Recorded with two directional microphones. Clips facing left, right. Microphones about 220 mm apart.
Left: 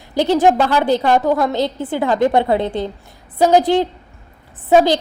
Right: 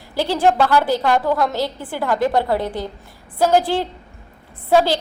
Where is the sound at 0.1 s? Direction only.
20° left (ahead or behind).